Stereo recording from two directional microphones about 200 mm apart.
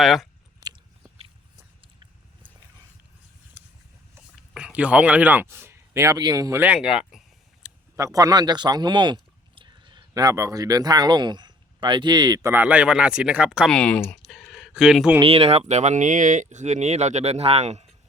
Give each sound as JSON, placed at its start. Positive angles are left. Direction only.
{"t": 0.0, "sound": "speech", "side_deg": 0}
{"t": 4.5, "sound": "speech", "side_deg": -5}
{"t": 7.9, "sound": "speech", "side_deg": -15}
{"t": 15.2, "sound": "speech", "side_deg": -30}